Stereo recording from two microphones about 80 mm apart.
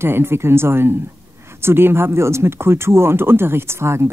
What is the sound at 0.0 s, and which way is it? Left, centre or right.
Speech, right.